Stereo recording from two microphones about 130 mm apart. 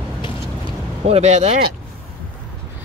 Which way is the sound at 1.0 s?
55° right (ahead or behind).